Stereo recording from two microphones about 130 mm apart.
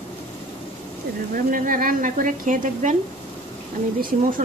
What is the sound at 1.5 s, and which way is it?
Speech, 90° right.